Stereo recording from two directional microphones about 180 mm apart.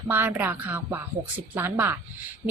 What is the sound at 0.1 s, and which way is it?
A woman's voice, 10° right (ahead or behind).